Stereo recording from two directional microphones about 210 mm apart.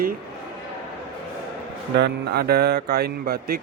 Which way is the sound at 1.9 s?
50° right (ahead or behind).